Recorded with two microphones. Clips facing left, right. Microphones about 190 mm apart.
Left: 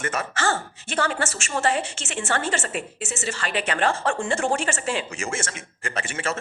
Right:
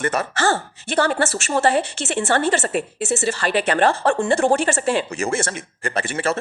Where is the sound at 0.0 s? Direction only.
35° right (ahead or behind).